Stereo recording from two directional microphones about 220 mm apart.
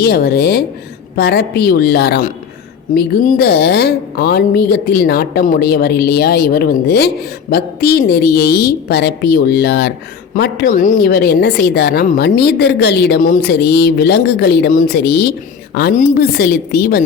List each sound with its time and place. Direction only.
0.0 s speech: 45° left (ahead or behind)